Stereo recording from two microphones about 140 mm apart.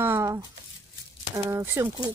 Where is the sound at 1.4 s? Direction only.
20° right (ahead or behind).